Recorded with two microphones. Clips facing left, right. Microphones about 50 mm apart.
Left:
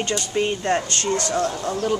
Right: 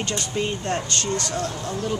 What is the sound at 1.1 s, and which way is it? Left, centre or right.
Speech, left.